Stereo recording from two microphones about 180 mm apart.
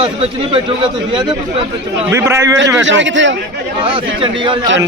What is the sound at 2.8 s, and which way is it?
Speech, 90° right.